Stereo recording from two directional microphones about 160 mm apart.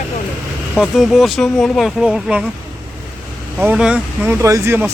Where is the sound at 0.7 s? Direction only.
Centre (ahead or behind).